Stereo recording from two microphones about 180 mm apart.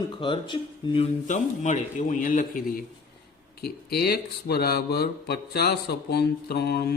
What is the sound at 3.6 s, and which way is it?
Speech, 60° left (ahead or behind).